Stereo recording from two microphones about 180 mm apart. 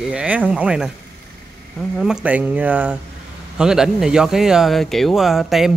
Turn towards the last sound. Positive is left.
turn(degrees=0)  # may be behind; listen again after turning